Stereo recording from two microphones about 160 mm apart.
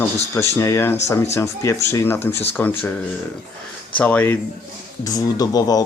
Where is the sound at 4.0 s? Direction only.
10° left (ahead or behind).